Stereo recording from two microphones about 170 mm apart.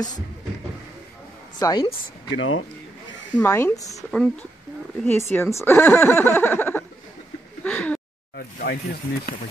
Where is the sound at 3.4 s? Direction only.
10° left (ahead or behind).